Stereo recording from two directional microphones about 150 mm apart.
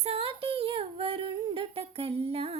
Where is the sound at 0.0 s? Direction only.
40° right (ahead or behind).